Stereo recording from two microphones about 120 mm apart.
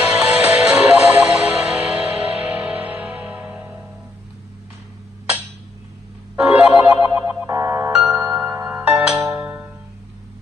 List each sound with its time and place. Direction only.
0.0 s music: 10° right (ahead or behind)
6.3 s music: 10° right (ahead or behind)